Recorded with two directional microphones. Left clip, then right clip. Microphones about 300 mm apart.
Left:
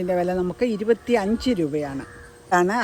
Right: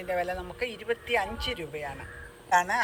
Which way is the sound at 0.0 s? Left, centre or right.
Left.